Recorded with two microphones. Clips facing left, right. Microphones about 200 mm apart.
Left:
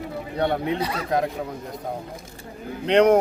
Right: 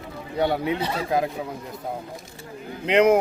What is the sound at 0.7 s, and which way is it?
Speech, 25° right (ahead or behind).